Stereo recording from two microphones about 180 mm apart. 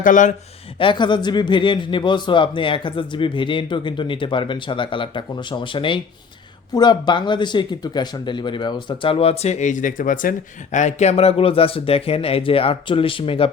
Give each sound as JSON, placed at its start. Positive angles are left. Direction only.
{"t": 0.0, "sound": "speech", "side_deg": 45}
{"t": 0.8, "sound": "speech", "side_deg": 25}